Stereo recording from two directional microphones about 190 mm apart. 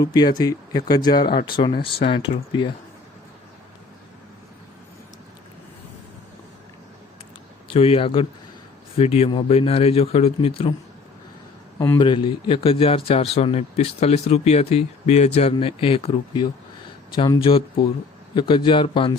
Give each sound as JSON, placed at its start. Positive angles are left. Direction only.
{"t": 0.0, "sound": "speech", "side_deg": 20}
{"t": 7.7, "sound": "speech", "side_deg": 30}
{"t": 11.9, "sound": "speech", "side_deg": 25}